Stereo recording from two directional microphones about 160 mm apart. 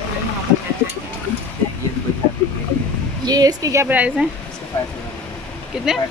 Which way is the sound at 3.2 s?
25° right (ahead or behind).